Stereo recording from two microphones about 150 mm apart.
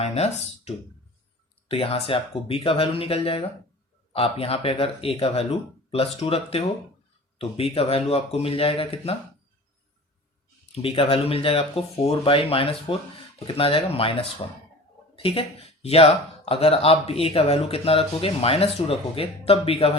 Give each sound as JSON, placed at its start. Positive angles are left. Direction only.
{"t": 0.0, "sound": "speech", "side_deg": 45}
{"t": 10.7, "sound": "speech", "side_deg": 40}